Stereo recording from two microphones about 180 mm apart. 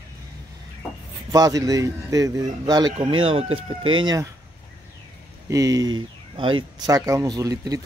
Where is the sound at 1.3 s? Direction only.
20° right (ahead or behind).